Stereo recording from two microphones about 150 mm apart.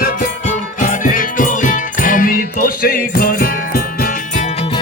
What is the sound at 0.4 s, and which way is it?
Music, 55° left (ahead or behind).